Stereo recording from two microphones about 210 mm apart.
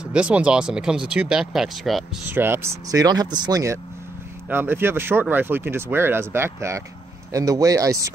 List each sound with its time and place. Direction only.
0.0 s speech: 5° right (ahead or behind)